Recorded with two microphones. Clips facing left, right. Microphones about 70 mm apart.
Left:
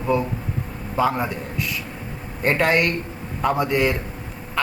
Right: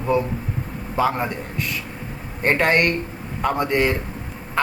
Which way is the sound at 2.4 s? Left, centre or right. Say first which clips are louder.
Right 1 dB; centre.